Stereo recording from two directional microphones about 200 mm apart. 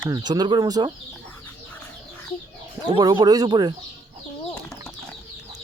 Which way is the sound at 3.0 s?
20° right (ahead or behind).